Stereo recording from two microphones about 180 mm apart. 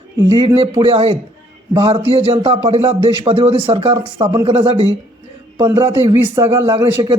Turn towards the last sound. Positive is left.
turn(degrees=-20)  # may be behind; listen again after turning